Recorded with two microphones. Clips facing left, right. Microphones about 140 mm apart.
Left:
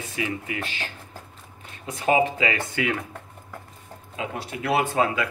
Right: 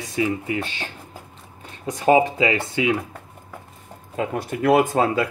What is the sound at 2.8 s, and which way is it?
Speech, 15° right (ahead or behind).